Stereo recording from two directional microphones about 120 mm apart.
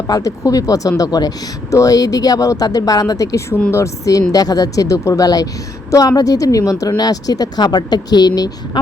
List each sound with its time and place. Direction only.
0.1 s speech: 30° left (ahead or behind)